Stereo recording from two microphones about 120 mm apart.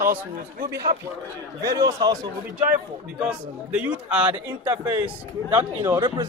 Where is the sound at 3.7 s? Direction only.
10° right (ahead or behind).